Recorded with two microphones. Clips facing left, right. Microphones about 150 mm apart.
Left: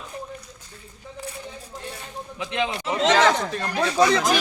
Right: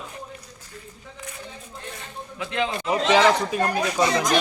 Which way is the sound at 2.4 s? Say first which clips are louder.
Even; 20° left (ahead or behind).